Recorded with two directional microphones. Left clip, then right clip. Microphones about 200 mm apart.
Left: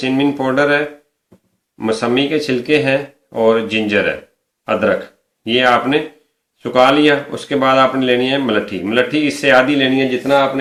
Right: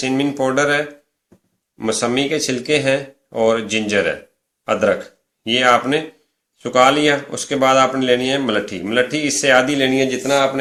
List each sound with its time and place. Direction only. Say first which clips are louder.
0.0 s speech: left 2 dB; 30° right (ahead or behind)
1.8 s speech: left 3 dB; 30° right (ahead or behind)